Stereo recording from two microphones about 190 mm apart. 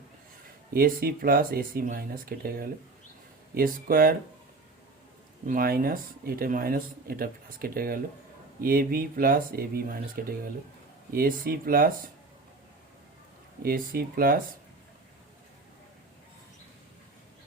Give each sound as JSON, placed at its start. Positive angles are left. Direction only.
{"t": 0.7, "sound": "speech", "side_deg": -50}
{"t": 5.5, "sound": "speech", "side_deg": -50}
{"t": 13.6, "sound": "speech", "side_deg": -50}